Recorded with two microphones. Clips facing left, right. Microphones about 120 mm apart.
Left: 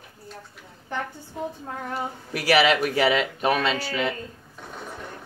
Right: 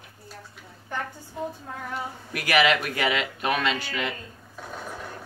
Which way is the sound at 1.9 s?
35° left (ahead or behind).